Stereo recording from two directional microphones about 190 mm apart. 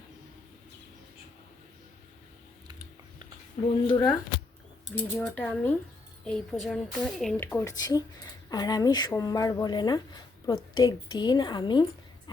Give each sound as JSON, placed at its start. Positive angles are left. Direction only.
{"t": 3.8, "sound": "speech", "side_deg": 20}
{"t": 4.9, "sound": "speech", "side_deg": 5}
{"t": 7.3, "sound": "speech", "side_deg": 10}